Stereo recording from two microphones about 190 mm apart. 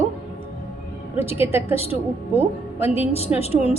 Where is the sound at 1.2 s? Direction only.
10° right (ahead or behind).